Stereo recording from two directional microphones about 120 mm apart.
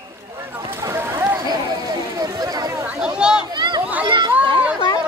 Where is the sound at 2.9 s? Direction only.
5° right (ahead or behind).